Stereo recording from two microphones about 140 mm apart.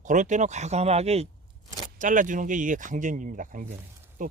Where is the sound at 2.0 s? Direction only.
65° right (ahead or behind).